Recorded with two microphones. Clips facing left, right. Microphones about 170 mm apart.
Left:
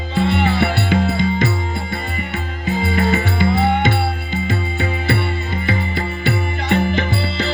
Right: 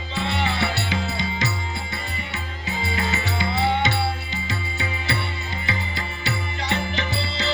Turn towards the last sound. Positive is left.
turn(degrees=50)  # may be behind; listen again after turning